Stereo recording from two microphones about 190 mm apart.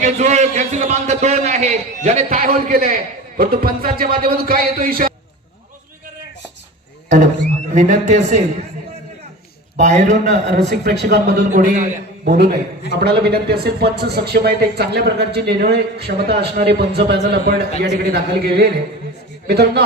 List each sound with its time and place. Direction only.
0.0 s a man's voice: 35° right (ahead or behind)
7.7 s a man's voice: 40° right (ahead or behind)
9.7 s a man's voice: 40° right (ahead or behind)
10.7 s speech: 65° right (ahead or behind)
11.5 s a man's voice: 40° right (ahead or behind); by 19.8 s 60° right (ahead or behind)